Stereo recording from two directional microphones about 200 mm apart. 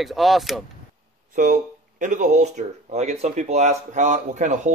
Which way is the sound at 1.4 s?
40° right (ahead or behind).